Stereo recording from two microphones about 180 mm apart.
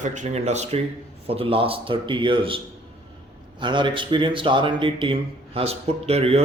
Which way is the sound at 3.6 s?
25° right (ahead or behind).